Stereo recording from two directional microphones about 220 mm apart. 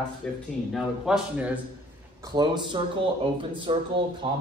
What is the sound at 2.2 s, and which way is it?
Speech, 20° right (ahead or behind).